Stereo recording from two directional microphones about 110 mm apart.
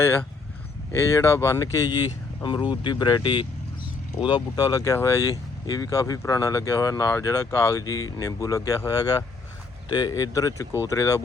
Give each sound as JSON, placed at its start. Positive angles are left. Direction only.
{"t": 0.0, "sound": "speech", "side_deg": 20}